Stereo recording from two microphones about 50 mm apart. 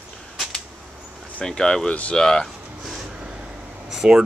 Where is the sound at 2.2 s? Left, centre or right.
Centre.